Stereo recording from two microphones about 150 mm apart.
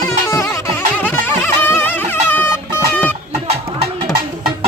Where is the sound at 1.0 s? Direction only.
15° left (ahead or behind).